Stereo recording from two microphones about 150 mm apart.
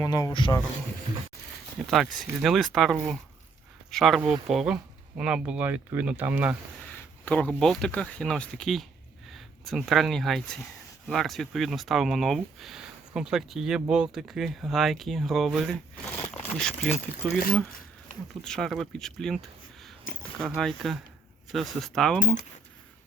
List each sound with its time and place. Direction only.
0.0 s speech: 25° left (ahead or behind)
1.9 s speech: centre (ahead or behind)
7.3 s speech: 10° left (ahead or behind)
18.4 s speech: 5° left (ahead or behind)
20.4 s speech: 5° left (ahead or behind)